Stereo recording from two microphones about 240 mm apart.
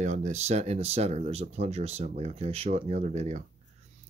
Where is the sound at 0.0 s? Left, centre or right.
Right.